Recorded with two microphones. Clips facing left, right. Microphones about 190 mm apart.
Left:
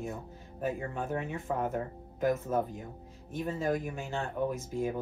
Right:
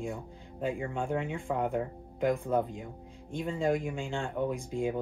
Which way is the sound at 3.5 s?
15° right (ahead or behind).